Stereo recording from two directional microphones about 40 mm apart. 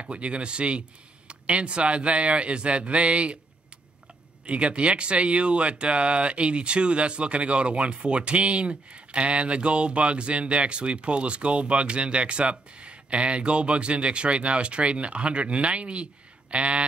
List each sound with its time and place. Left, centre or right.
0.0 s speech: right
4.5 s speech: right